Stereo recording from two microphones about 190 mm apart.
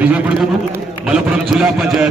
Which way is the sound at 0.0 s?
10° right (ahead or behind).